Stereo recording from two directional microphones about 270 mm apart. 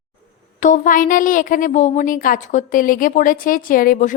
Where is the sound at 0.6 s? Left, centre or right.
Left.